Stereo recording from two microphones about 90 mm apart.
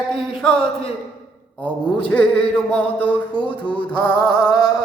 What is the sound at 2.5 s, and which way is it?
Music, 15° left (ahead or behind).